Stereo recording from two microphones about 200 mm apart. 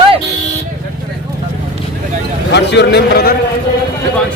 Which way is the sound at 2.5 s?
60° left (ahead or behind).